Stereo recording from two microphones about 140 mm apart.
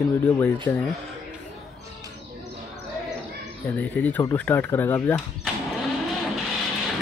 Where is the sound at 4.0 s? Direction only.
10° left (ahead or behind).